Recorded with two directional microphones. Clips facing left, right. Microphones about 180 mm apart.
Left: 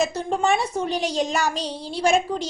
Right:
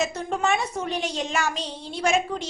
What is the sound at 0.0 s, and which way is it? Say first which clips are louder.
A woman's voice: left 3 dB; 30° left (ahead or behind).